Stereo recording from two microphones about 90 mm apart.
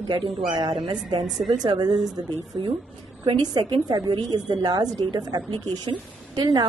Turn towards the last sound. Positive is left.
turn(degrees=-50)  # may be behind; listen again after turning